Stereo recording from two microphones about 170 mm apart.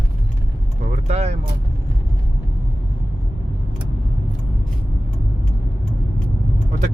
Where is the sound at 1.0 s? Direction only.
40° right (ahead or behind).